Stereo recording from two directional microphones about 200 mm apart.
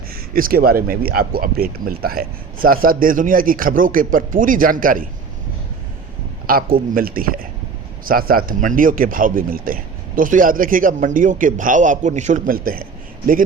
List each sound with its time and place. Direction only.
0.1 s speech: 45° right (ahead or behind)
6.5 s speech: 45° right (ahead or behind)